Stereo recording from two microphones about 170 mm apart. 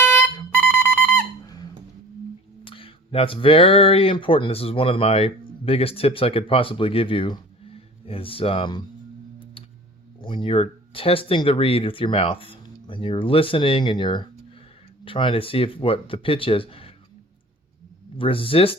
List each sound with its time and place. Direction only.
0.0 s music: 15° left (ahead or behind)
1.5 s squeak: 25° left (ahead or behind)
2.6 s speech: 30° left (ahead or behind)
10.2 s speech: 30° left (ahead or behind)
18.2 s speech: 30° left (ahead or behind)